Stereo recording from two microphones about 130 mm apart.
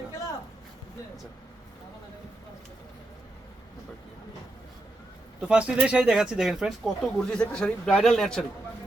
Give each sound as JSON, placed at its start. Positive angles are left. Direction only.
{"t": 5.4, "sound": "speech", "side_deg": -10}